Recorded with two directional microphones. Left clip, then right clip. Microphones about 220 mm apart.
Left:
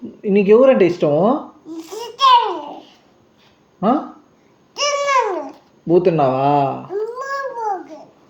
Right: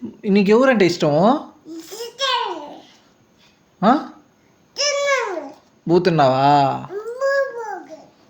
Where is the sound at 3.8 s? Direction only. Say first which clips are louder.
Right 1 dB; 45° right (ahead or behind).